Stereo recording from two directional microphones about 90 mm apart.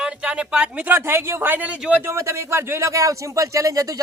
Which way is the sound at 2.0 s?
30° right (ahead or behind).